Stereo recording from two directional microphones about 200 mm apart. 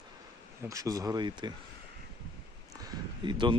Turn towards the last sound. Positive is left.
turn(degrees=-20)  # may be behind; listen again after turning